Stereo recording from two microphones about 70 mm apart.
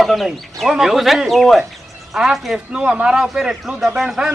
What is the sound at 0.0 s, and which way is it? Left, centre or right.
Speech, centre.